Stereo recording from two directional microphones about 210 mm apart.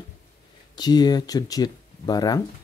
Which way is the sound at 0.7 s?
20° left (ahead or behind).